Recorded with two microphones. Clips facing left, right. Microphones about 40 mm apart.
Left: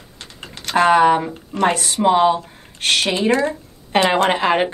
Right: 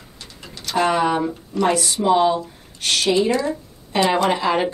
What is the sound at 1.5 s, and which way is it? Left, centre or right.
Speech, left.